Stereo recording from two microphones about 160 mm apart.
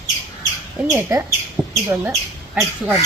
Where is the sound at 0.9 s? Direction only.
15° right (ahead or behind).